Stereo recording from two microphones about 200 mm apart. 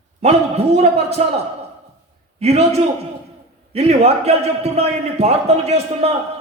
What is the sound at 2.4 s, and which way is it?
A man's voice, 30° right (ahead or behind).